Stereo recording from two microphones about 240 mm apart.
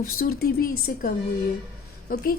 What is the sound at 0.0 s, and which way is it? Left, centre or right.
A woman's voice, left.